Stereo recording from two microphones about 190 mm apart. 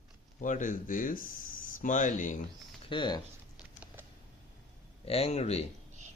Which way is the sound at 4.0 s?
10° right (ahead or behind).